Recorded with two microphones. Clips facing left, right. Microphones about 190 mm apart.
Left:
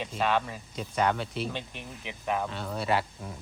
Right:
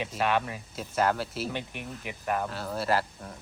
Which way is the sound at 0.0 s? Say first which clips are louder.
Even; 5° right (ahead or behind).